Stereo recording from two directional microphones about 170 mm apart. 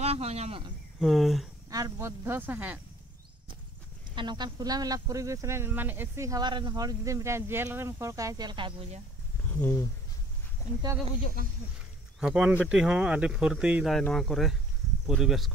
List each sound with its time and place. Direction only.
0.0 s speech: 40° right (ahead or behind)
0.9 s speech: centre (ahead or behind)
1.7 s speech: 20° right (ahead or behind)
4.1 s speech: 25° right (ahead or behind)
9.6 s speech: 10° left (ahead or behind)
12.2 s speech: 5° right (ahead or behind)